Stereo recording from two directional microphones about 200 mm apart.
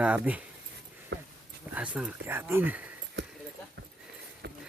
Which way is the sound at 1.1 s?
55° right (ahead or behind).